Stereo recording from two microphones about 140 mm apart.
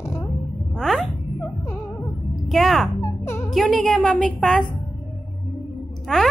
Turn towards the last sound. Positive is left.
turn(degrees=5)  # may be behind; listen again after turning